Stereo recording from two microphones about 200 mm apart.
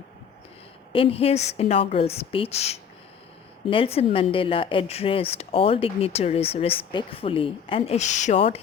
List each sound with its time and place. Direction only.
0.9 s a woman's voice: 30° left (ahead or behind)